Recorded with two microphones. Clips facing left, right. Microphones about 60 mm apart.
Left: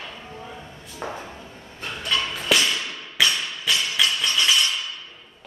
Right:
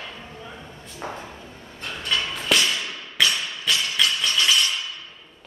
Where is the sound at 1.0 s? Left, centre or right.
Centre.